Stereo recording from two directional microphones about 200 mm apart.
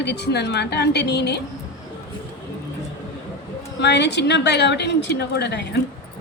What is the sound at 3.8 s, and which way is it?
A woman's voice, 60° left (ahead or behind).